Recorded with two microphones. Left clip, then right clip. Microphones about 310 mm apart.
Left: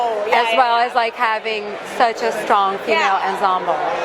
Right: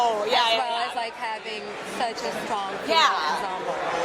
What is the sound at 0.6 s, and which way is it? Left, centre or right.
Speech, left.